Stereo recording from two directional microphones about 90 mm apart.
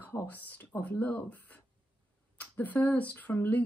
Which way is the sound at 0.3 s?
20° left (ahead or behind).